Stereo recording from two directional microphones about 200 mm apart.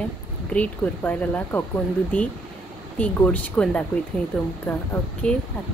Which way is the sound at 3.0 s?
5° left (ahead or behind).